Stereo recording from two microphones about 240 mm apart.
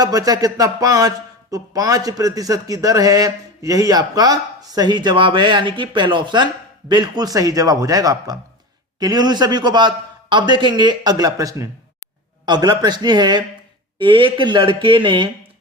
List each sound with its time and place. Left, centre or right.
0.0 s a man's voice: centre